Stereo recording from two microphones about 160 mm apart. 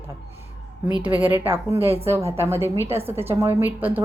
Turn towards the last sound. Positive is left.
turn(degrees=-10)  # may be behind; listen again after turning